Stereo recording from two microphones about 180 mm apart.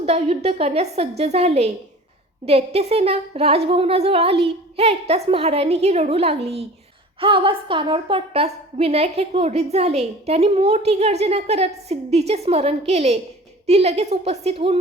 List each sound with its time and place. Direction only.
0.0 s a woman's voice: 35° right (ahead or behind)